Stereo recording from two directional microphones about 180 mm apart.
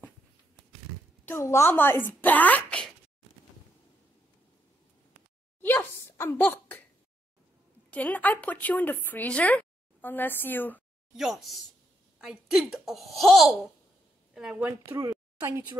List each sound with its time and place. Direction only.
1.2 s speech: 15° left (ahead or behind)
5.6 s a sound: 10° left (ahead or behind)
7.9 s speech: 10° left (ahead or behind)
11.1 s a woman's voice: centre (ahead or behind)
14.8 s a woman's voice: 20° right (ahead or behind)